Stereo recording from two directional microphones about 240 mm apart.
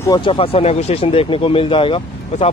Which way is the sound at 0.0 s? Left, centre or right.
Centre.